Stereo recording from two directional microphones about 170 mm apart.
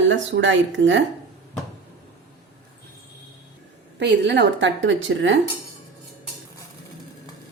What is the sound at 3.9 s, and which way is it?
A woman's voice, 85° right.